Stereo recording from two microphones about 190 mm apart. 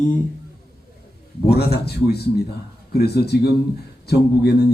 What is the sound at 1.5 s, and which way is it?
A man's voice, 55° left (ahead or behind).